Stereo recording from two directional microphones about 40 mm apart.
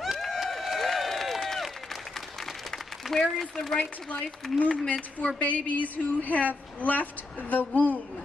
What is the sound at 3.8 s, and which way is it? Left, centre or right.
A woman's voice, left.